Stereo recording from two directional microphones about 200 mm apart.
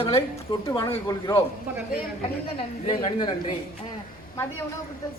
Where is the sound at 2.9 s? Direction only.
25° left (ahead or behind).